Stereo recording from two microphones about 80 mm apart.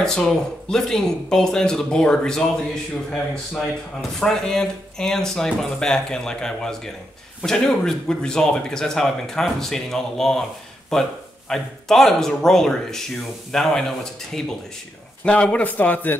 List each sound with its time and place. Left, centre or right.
0.0 s speech: centre
15.2 s speech: centre